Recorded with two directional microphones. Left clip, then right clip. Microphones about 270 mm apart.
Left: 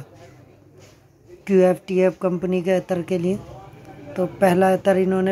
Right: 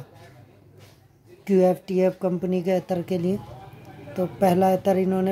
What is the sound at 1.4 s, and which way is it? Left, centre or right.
Speech, centre.